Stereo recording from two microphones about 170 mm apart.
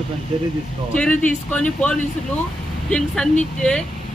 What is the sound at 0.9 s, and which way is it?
Speech, 5° left (ahead or behind).